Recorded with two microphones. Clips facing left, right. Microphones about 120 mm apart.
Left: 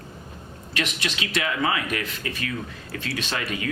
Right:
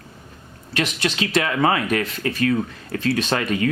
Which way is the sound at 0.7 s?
35° right (ahead or behind).